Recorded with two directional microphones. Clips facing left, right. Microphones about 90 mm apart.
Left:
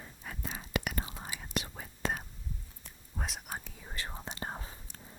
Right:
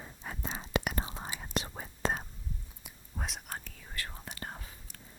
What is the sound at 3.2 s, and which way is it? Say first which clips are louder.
Whispering: left 1 dB; centre (ahead or behind).